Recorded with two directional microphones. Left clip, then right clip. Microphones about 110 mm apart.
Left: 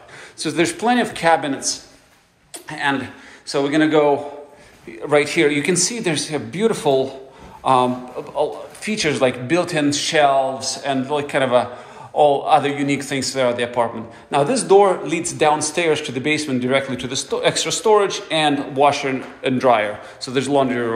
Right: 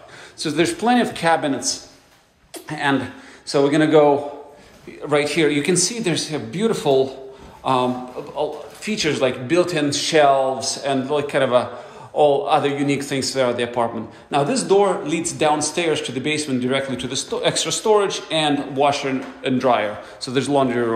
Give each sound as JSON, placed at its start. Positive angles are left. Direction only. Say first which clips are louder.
{"t": 0.4, "sound": "a man's voice", "louder": "left 1 dB", "side_deg": -35}
{"t": 2.7, "sound": "a man's voice", "louder": "even", "side_deg": -70}
{"t": 5.0, "sound": "speech", "louder": "left 2 dB", "side_deg": -35}
{"t": 9.8, "sound": "a man's voice", "louder": "even", "side_deg": -50}
{"t": 14.3, "sound": "speech", "louder": "left 3 dB", "side_deg": -30}
{"t": 20.2, "sound": "a man's voice", "louder": "left 1 dB", "side_deg": -50}